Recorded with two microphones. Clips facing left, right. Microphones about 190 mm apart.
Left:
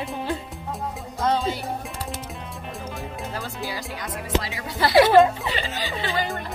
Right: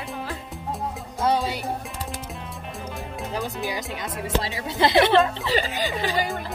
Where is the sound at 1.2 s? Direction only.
15° right (ahead or behind).